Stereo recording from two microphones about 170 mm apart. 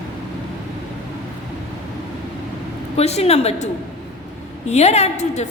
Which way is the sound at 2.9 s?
40° left (ahead or behind).